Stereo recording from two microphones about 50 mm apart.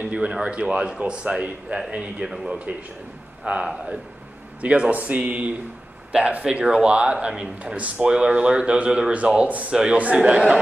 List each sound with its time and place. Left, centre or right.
0.0 s a sound: right
0.3 s speech: right
2.2 s speech: centre
3.6 s speech: centre
4.6 s speech: right
7.7 s speech: right
8.1 s speech: centre